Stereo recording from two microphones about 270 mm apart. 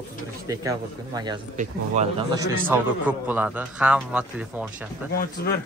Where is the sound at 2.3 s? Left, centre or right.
Centre.